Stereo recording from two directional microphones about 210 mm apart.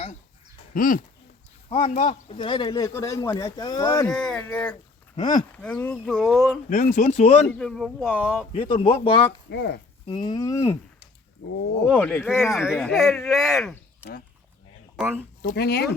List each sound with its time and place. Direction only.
0.7 s speech: 40° left (ahead or behind)
1.7 s speech: 25° left (ahead or behind); by 6.6 s 5° left (ahead or behind)
6.7 s speech: 35° left (ahead or behind)
7.6 s speech: centre (ahead or behind)
8.5 s speech: 25° left (ahead or behind)
9.5 s speech: 50° left (ahead or behind)
10.1 s speech: 20° left (ahead or behind)
11.4 s speech: 50° left (ahead or behind)
11.9 s speech: 5° left (ahead or behind)
12.5 s speech: centre (ahead or behind)
14.9 s speech: 10° right (ahead or behind)
15.4 s speech: 50° left (ahead or behind)